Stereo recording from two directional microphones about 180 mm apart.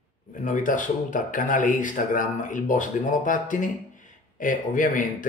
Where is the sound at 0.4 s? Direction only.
45° left (ahead or behind).